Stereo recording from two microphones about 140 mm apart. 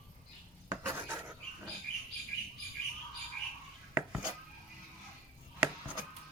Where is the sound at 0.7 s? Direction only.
15° right (ahead or behind).